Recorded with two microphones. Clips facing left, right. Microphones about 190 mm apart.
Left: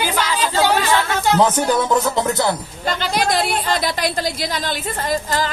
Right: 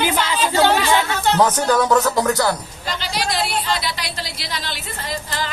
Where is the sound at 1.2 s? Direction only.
10° left (ahead or behind).